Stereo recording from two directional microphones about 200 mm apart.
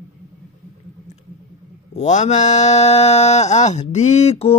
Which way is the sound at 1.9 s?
35° left (ahead or behind).